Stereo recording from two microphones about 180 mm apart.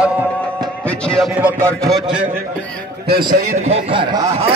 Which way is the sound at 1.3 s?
10° right (ahead or behind).